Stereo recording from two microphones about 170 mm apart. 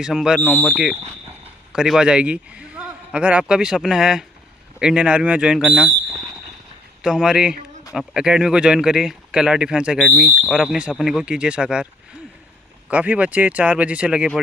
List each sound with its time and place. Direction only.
0.0 s speech: 5° right (ahead or behind)
7.0 s speech: 5° right (ahead or behind)
12.9 s speech: 10° right (ahead or behind)